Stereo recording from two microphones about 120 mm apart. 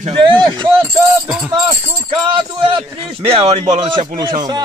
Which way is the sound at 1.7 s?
45° right (ahead or behind).